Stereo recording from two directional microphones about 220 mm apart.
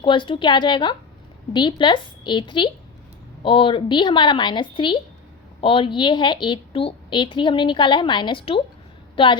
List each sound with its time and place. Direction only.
0.0 s a woman's voice: 20° left (ahead or behind)